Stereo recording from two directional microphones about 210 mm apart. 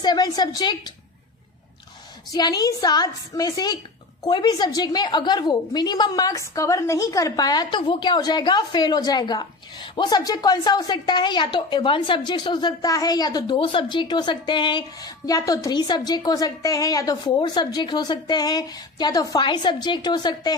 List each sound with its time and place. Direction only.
0.0 s a woman's voice: 20° left (ahead or behind)
2.3 s a woman's voice: 20° left (ahead or behind)